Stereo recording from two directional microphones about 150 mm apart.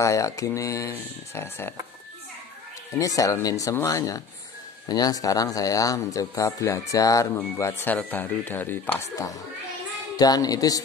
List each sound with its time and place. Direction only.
0.0 s speech: 20° left (ahead or behind)
3.0 s speech: 20° left (ahead or behind)